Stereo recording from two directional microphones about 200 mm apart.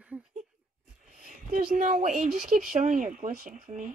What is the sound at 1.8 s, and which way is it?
Speech, 35° right (ahead or behind).